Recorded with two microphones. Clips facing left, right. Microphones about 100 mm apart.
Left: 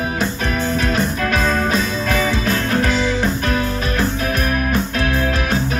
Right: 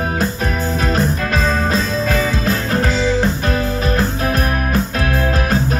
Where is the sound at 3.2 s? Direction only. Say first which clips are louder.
Right 1 dB; 35° right (ahead or behind).